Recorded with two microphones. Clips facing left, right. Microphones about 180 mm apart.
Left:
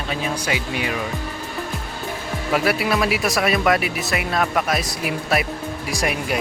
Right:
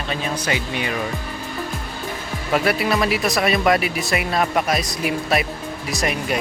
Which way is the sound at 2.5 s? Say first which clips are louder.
Right 1 dB; 5° left (ahead or behind).